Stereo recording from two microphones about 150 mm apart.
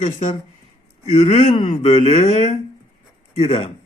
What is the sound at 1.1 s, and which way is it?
A man's voice, 35° left (ahead or behind).